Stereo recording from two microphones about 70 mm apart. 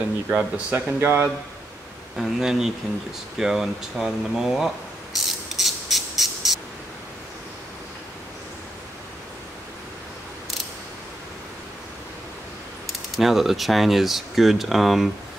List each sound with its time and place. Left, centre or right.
0.3 s speech: centre
0.7 s speech: right
2.1 s speech: centre
5.6 s a sound: centre
13.1 s speech: centre